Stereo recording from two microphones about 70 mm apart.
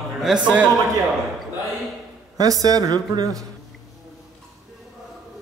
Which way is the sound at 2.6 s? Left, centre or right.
Right.